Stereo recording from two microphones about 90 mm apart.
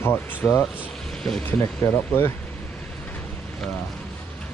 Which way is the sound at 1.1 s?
5° left (ahead or behind).